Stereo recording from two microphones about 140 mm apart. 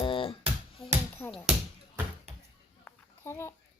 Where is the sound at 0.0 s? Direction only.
40° left (ahead or behind).